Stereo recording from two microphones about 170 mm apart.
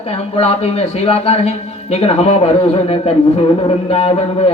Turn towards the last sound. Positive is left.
turn(degrees=40)  # may be behind; listen again after turning